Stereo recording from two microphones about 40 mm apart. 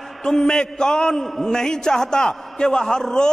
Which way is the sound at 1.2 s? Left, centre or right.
Centre.